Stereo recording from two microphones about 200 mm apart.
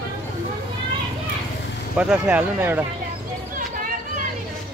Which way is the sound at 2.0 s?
5° right (ahead or behind).